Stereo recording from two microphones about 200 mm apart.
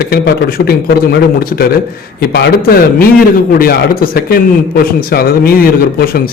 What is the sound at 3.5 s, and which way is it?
A man's voice, 45° left (ahead or behind).